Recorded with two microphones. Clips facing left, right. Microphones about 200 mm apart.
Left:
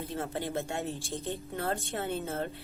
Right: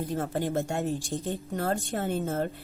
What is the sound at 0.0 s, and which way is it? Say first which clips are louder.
Speech: right 5 dB; 45° right (ahead or behind).